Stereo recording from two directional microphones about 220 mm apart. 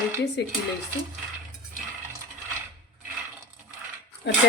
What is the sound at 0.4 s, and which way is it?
Speech, 50° left (ahead or behind).